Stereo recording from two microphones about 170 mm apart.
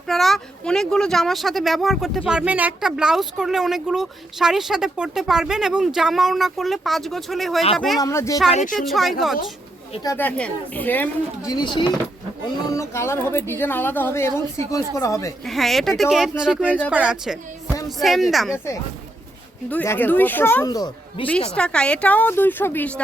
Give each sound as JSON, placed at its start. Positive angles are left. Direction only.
{"t": 0.1, "sound": "speech", "side_deg": 0}
{"t": 7.9, "sound": "speech", "side_deg": 20}
{"t": 8.4, "sound": "speech", "side_deg": 45}
{"t": 8.8, "sound": "speech", "side_deg": 0}
{"t": 10.0, "sound": "speech", "side_deg": 15}
{"t": 11.5, "sound": "speech", "side_deg": 30}
{"t": 12.7, "sound": "speech", "side_deg": 15}
{"t": 15.4, "sound": "a woman's voice", "side_deg": 0}
{"t": 18.5, "sound": "speech", "side_deg": 15}
{"t": 20.7, "sound": "speech", "side_deg": 25}
{"t": 21.5, "sound": "speech", "side_deg": 5}